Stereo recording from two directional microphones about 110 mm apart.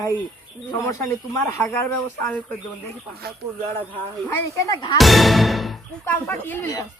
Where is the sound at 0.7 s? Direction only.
25° left (ahead or behind).